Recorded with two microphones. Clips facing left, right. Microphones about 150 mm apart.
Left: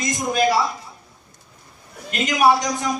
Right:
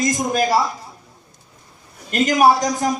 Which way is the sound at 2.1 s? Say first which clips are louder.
Right 3 dB; 40° right (ahead or behind).